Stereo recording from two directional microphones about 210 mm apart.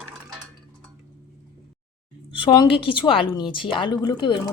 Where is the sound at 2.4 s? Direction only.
25° left (ahead or behind).